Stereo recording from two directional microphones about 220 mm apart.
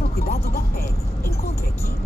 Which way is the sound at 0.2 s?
45° left (ahead or behind).